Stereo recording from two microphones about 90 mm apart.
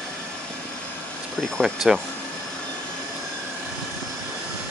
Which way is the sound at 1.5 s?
Centre (ahead or behind).